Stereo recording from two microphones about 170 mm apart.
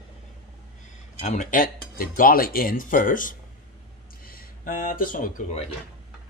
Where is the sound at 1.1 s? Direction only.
45° left (ahead or behind).